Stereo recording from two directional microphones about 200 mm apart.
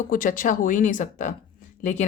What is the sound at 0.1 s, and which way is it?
A woman's voice, 40° left (ahead or behind).